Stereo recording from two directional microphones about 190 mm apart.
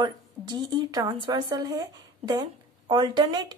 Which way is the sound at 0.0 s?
20° right (ahead or behind).